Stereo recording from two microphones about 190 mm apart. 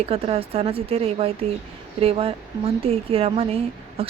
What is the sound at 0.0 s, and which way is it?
A woman's voice, 30° right (ahead or behind).